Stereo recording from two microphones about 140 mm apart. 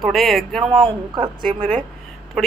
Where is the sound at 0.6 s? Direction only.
35° right (ahead or behind).